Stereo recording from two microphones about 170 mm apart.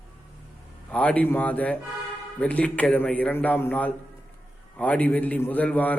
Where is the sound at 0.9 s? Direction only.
10° left (ahead or behind).